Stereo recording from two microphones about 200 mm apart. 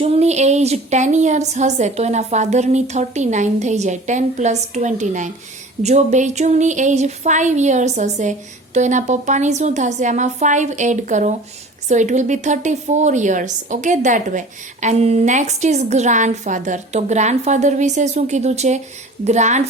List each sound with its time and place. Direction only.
0.0 s a woman's voice: 30° right (ahead or behind)